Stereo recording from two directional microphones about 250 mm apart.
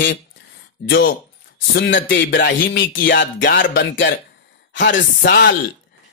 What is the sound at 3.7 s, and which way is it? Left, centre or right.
Music, left.